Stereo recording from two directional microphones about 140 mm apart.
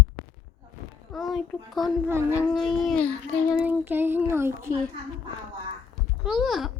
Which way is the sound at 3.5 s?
15° right (ahead or behind).